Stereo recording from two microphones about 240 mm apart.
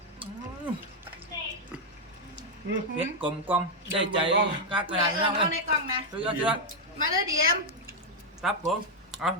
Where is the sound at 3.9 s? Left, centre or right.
Right.